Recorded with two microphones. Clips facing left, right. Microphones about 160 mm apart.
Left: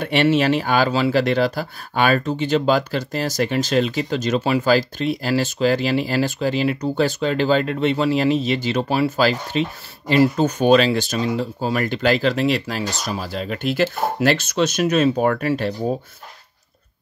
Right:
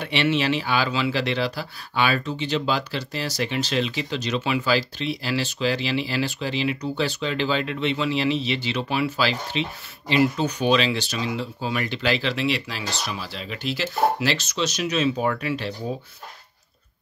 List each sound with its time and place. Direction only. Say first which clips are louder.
0.0 s speech: left 6 dB; 45° left (ahead or behind)